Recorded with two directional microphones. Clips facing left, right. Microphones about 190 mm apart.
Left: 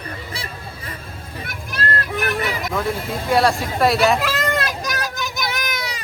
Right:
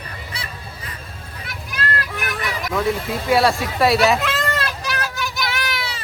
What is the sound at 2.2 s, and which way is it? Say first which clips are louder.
Vehicle: left 4 dB; 30° left (ahead or behind).